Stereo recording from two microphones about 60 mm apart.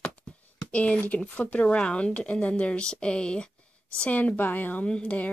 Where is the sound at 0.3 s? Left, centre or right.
Centre.